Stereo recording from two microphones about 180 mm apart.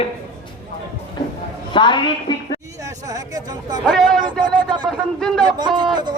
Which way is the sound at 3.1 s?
20° right (ahead or behind).